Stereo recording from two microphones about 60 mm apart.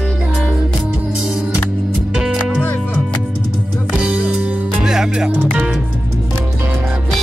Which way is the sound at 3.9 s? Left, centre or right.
Centre.